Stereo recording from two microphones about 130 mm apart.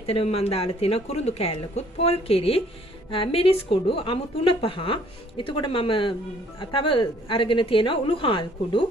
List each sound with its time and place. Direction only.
0.0 s a woman's voice: 50° left (ahead or behind)